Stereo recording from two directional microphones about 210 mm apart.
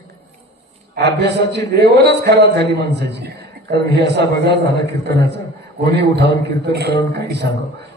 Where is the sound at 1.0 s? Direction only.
50° right (ahead or behind).